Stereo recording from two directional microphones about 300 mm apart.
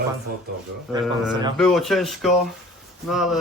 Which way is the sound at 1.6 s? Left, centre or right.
Centre.